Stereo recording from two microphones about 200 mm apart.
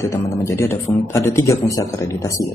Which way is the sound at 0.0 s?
15° left (ahead or behind).